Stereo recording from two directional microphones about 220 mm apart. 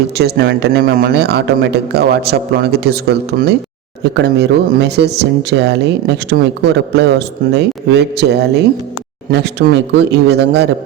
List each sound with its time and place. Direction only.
0.2 s speech: 50° right (ahead or behind)